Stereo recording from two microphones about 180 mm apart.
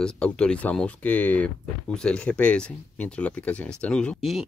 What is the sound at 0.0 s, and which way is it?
Speech, 5° left (ahead or behind).